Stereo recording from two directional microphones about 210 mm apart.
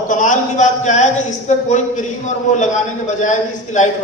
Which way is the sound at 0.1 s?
35° left (ahead or behind).